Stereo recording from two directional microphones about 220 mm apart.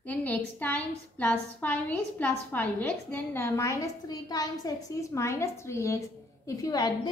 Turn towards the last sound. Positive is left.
turn(degrees=20)  # may be behind; listen again after turning